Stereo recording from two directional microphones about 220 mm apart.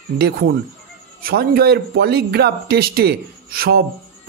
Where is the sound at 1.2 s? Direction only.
45° right (ahead or behind).